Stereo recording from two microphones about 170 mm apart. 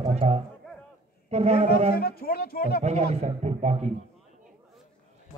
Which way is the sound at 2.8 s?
40° right (ahead or behind).